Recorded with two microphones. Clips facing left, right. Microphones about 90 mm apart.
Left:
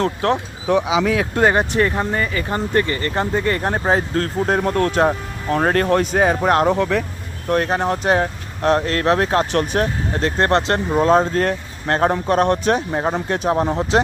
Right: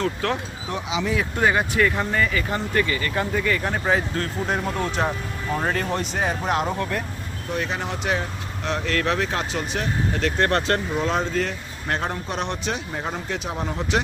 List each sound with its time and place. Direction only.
0.2 s speech: 20° left (ahead or behind)
0.7 s speech: 70° left (ahead or behind)
1.5 s speech: 30° left (ahead or behind)
9.5 s speech: 60° left (ahead or behind)
10.2 s speech: 35° left (ahead or behind)
10.9 s speech: 45° left (ahead or behind)
13.7 s speech: 30° left (ahead or behind)